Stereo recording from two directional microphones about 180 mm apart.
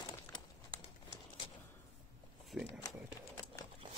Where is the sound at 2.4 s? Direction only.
5° right (ahead or behind).